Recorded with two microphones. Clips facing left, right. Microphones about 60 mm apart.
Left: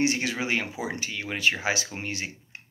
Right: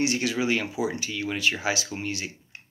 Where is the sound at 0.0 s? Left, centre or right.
Left.